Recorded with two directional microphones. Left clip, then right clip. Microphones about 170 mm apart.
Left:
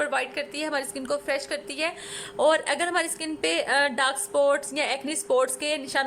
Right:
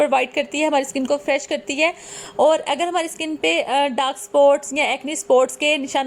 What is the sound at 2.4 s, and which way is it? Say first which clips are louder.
A woman's voice: right 5 dB; 5° right (ahead or behind).